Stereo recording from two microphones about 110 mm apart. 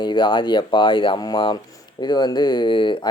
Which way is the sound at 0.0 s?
45° left (ahead or behind).